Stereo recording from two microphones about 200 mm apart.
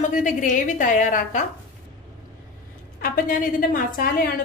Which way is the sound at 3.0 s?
45° left (ahead or behind).